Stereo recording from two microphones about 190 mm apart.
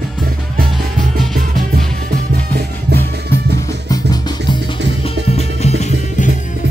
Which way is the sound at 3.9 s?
20° left (ahead or behind).